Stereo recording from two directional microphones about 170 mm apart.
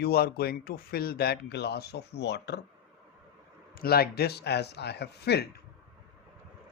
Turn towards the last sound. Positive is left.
turn(degrees=75)  # may be behind; listen again after turning